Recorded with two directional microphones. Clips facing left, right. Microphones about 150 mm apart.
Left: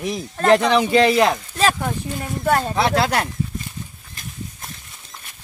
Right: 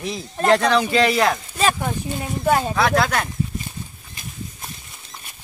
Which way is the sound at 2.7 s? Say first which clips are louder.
Even; 25° left (ahead or behind).